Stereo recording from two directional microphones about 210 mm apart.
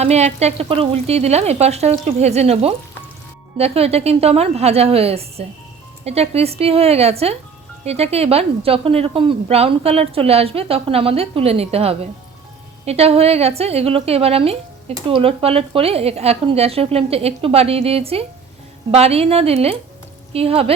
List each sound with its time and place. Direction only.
0.0 s a woman's voice: 30° right (ahead or behind)